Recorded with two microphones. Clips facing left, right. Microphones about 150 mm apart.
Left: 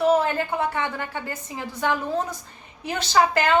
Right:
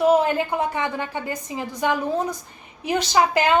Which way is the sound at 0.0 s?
15° right (ahead or behind).